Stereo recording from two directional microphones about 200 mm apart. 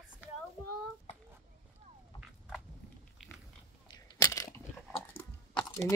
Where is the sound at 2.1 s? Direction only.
Centre (ahead or behind).